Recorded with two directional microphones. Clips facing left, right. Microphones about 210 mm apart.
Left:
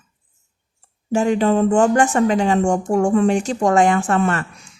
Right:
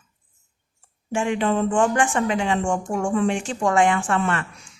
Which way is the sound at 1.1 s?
40° left (ahead or behind).